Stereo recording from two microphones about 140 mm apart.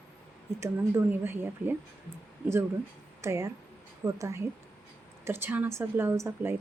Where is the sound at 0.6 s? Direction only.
15° right (ahead or behind).